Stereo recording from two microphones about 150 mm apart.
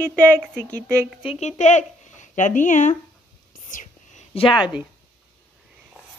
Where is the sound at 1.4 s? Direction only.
50° left (ahead or behind).